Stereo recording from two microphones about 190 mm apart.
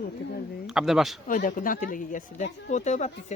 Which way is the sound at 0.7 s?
Centre (ahead or behind).